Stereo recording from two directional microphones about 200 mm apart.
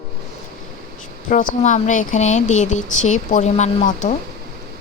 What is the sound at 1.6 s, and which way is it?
Speech, 40° left (ahead or behind).